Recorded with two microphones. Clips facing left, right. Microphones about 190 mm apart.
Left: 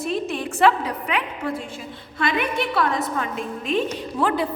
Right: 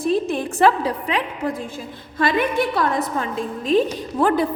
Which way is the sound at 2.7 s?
35° right (ahead or behind).